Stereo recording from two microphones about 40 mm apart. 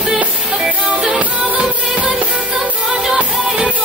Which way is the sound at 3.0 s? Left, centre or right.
Centre.